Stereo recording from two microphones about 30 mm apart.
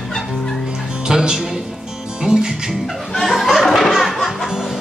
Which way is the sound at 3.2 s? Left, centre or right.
Centre.